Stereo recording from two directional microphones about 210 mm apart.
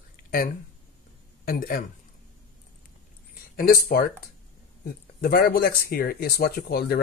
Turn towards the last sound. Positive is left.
turn(degrees=45)  # may be behind; listen again after turning